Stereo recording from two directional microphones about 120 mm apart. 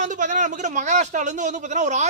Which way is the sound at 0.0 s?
90° right.